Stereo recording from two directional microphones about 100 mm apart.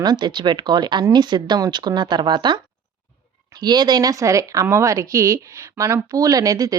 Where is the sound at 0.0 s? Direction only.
45° right (ahead or behind).